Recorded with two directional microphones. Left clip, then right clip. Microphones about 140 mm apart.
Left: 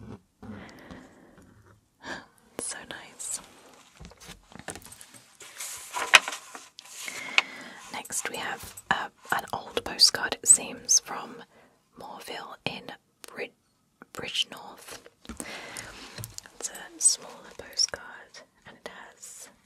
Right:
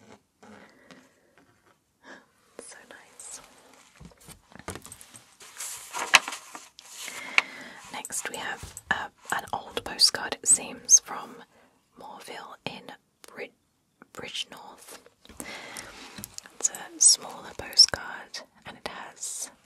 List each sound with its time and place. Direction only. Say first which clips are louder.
2.0 s whispering: left 9 dB; 90° left
3.3 s a sound: left 5 dB; 40° left (ahead or behind)
5.9 s vehicle: left 2 dB; 5° right (ahead or behind)
6.8 s a sound: left 2 dB; 25° left (ahead or behind)
7.9 s whispering: left 1 dB; 25° left (ahead or behind)
9.3 s speech: left 1 dB; 20° left (ahead or behind)
12.0 s whispering: left 2 dB; 25° left (ahead or behind)
16.0 s whispering: even; 5° left (ahead or behind)
17.0 s whispering: right 6 dB; 25° right (ahead or behind)
17.4 s whispering: right 9 dB; 40° right (ahead or behind)